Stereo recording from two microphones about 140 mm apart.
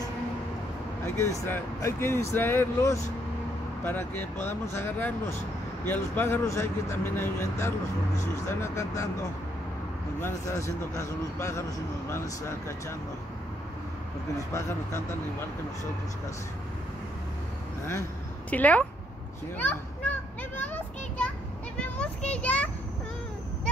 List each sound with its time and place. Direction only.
1.0 s speech: 20° left (ahead or behind)
10.2 s speech: 20° left (ahead or behind)
14.5 s speech: 20° left (ahead or behind)
18.5 s speech: 10° left (ahead or behind)
19.5 s children playing: 10° left (ahead or behind)
21.7 s a sound: 10° left (ahead or behind)
22.3 s speech: 10° left (ahead or behind)